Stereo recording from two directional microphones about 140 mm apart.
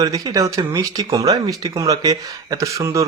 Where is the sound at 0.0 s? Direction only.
25° right (ahead or behind).